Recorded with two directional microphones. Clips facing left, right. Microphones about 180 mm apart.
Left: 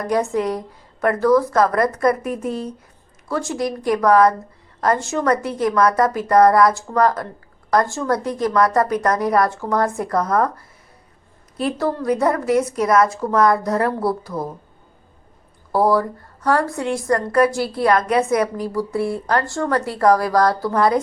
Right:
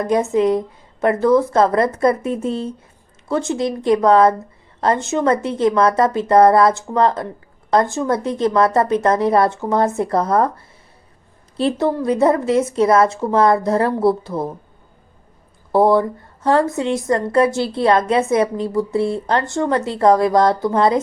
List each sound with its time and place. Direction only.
0.0 s a woman's voice: 20° right (ahead or behind)
11.5 s a woman's voice: 25° right (ahead or behind)
15.7 s a woman's voice: 25° right (ahead or behind)